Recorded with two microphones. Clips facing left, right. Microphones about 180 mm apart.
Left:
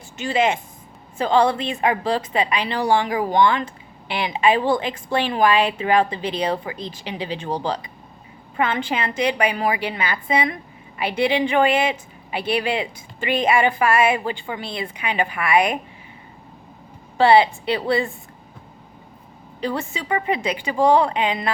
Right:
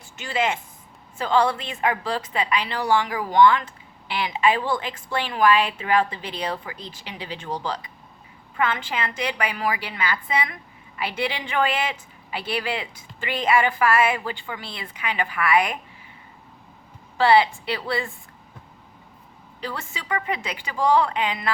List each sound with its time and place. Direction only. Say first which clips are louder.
0.2 s a woman's voice: left 5 dB; 20° left (ahead or behind)
17.2 s a woman's voice: left 3 dB; 25° left (ahead or behind)
19.6 s a woman's voice: left 7 dB; 20° left (ahead or behind)